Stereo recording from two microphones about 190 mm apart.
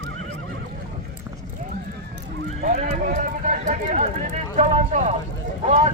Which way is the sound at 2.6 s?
40° right (ahead or behind).